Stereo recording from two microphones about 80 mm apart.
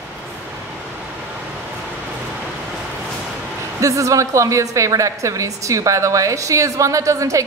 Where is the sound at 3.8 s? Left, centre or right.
Right.